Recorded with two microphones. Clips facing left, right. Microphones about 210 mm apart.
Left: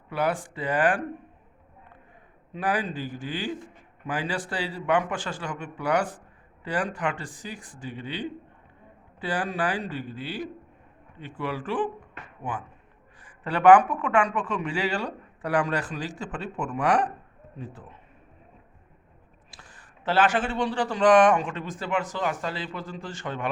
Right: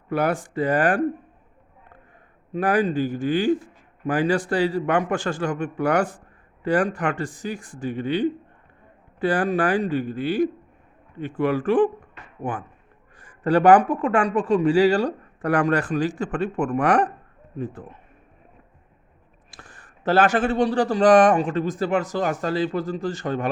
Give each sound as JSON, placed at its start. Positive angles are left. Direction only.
{"t": 0.1, "sound": "a man's voice", "side_deg": -45}
{"t": 2.5, "sound": "a man's voice", "side_deg": -45}
{"t": 19.5, "sound": "a man's voice", "side_deg": -50}